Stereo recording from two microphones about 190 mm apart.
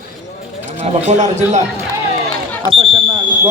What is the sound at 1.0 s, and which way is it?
Speech, 40° right (ahead or behind).